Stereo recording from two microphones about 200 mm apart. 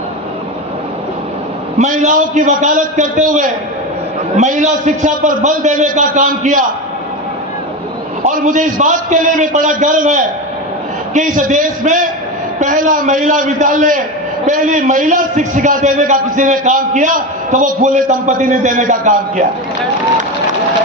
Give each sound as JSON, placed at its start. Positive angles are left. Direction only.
{"t": 1.8, "sound": "a man's voice", "side_deg": -40}
{"t": 8.2, "sound": "a man's voice", "side_deg": -40}